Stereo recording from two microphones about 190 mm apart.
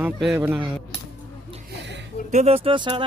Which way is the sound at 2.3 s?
35° right (ahead or behind).